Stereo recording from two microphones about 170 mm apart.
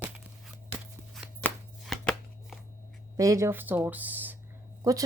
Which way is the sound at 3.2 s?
15° right (ahead or behind).